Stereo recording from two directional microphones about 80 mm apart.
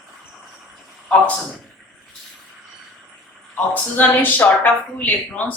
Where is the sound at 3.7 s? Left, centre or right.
Left.